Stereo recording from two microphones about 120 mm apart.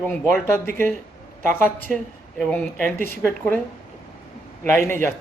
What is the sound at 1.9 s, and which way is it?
Speech, centre (ahead or behind).